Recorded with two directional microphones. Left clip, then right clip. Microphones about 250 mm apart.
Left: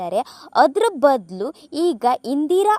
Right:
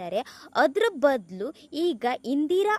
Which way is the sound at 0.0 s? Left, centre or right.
Centre.